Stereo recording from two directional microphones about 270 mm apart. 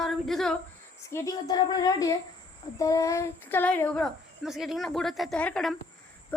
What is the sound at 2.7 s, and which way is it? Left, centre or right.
Speech, centre.